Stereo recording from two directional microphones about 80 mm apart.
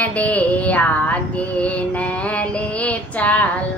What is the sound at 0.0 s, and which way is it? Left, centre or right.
Music, centre.